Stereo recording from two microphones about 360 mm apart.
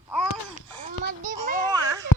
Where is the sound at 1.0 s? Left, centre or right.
Right.